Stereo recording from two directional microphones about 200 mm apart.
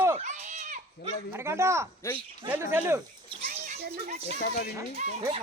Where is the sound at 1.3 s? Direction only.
10° right (ahead or behind).